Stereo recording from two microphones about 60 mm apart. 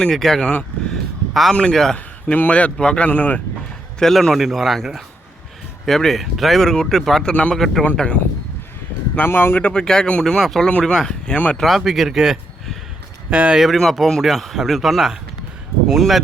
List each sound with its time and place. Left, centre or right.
0.0 s speech: centre
0.9 s a sound: centre
1.5 s speech: centre
2.2 s speech: left
3.1 s speech: left
4.0 s speech: centre
7.9 s speech: centre
9.2 s speech: left
9.6 s speech: centre
10.7 s speech: left
10.9 s a man's voice: centre
13.3 s speech: right
13.7 s speech: centre